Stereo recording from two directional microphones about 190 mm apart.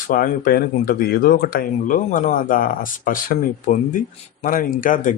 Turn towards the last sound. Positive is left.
turn(degrees=45)  # may be behind; listen again after turning